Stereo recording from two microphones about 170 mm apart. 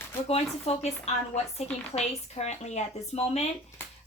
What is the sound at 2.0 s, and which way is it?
Speech, 40° left (ahead or behind).